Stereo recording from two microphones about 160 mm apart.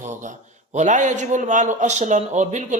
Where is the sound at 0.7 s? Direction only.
50° right (ahead or behind).